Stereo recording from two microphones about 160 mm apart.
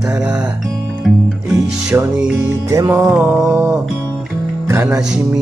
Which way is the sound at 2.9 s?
10° right (ahead or behind).